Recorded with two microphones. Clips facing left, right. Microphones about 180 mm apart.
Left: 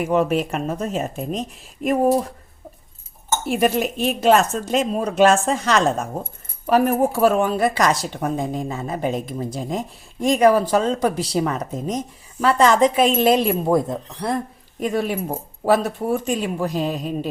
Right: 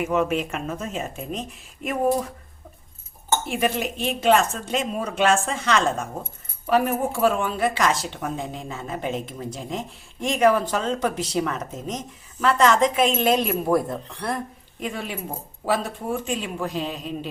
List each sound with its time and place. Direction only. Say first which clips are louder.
0.0 s a woman's voice: left 4 dB; 35° left (ahead or behind)
3.6 s a woman's voice: left 5 dB; 45° left (ahead or behind)
13.7 s speech: left 3 dB; 20° left (ahead or behind)
14.8 s a woman's voice: left 8 dB; 40° left (ahead or behind)